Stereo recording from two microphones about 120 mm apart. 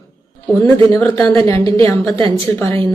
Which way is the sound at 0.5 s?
25° left (ahead or behind).